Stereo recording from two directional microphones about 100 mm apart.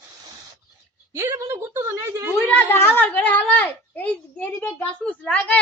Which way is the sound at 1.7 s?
25° right (ahead or behind).